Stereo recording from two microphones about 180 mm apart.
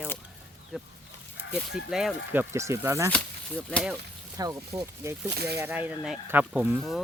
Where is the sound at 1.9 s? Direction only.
5° right (ahead or behind).